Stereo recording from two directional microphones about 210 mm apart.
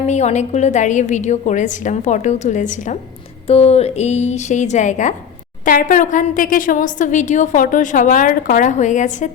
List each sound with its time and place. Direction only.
0.0 s a woman's voice: 30° left (ahead or behind)